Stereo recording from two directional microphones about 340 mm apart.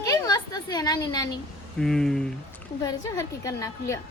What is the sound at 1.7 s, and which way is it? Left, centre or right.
A woman's voice, centre.